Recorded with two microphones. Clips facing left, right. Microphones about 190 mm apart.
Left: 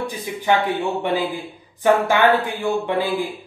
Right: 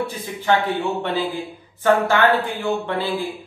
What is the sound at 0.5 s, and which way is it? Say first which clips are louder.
Speech: even; 15° left (ahead or behind).